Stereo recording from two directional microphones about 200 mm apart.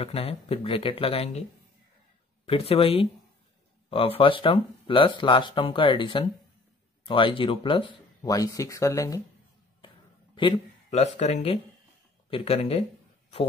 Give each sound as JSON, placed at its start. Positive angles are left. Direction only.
{"t": 0.0, "sound": "speech", "side_deg": 30}
{"t": 2.4, "sound": "speech", "side_deg": 30}
{"t": 10.3, "sound": "speech", "side_deg": 25}